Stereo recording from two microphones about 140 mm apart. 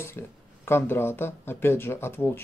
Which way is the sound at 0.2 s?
15° left (ahead or behind).